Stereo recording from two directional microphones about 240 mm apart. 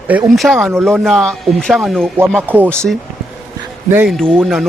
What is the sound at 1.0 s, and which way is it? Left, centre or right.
A man's voice, centre.